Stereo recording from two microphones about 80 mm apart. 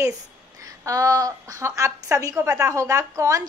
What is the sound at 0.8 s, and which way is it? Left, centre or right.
A woman's voice, right.